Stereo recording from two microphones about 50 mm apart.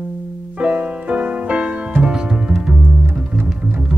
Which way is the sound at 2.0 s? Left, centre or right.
Centre.